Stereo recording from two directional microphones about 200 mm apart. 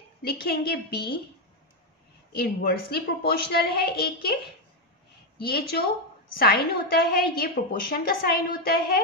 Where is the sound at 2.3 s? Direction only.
50° left (ahead or behind).